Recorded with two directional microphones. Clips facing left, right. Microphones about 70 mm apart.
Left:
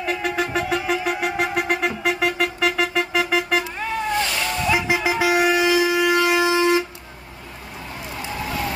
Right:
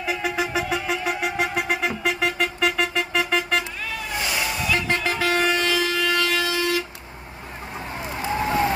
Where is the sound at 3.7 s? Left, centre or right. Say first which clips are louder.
Left 6 dB; left.